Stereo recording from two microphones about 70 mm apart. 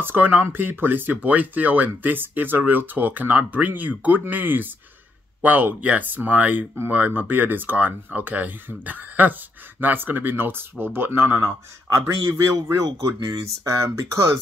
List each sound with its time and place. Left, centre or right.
0.0 s speech: right
11.9 s speech: right
13.2 s speech: right